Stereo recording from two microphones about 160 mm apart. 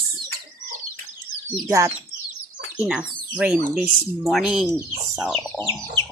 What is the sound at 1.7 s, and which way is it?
Speech, 20° right (ahead or behind).